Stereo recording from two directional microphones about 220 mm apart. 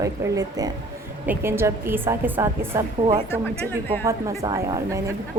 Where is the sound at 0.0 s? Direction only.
15° right (ahead or behind).